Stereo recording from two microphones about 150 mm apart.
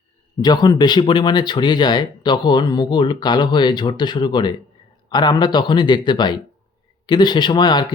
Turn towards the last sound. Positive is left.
turn(degrees=30)  # may be behind; listen again after turning